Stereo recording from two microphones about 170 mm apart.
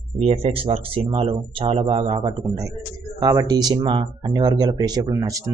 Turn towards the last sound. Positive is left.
turn(degrees=-25)  # may be behind; listen again after turning